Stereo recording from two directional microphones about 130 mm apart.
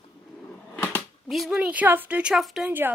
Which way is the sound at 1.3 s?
5° right (ahead or behind).